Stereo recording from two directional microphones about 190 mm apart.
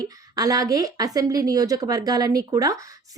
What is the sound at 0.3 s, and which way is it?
Speech, 20° right (ahead or behind).